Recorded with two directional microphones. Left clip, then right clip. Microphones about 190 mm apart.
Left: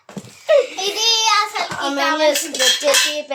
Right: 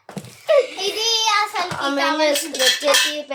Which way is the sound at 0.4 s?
5° right (ahead or behind).